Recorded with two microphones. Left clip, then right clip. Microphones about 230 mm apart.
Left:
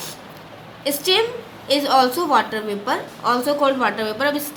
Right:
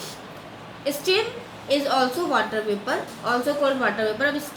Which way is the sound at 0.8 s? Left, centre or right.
Left.